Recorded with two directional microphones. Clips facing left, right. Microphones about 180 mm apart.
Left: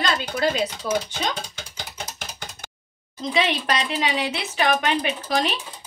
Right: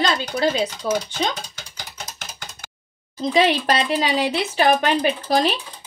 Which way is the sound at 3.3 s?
35° right (ahead or behind).